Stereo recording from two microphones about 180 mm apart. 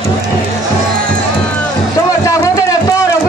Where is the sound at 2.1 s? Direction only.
20° left (ahead or behind).